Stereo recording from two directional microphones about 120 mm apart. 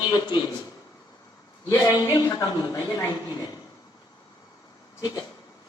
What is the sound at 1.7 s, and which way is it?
A woman's voice, 35° left (ahead or behind).